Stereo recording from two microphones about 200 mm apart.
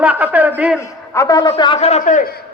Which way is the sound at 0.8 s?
15° left (ahead or behind).